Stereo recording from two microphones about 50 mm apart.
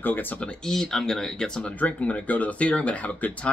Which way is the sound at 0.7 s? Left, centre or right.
Centre.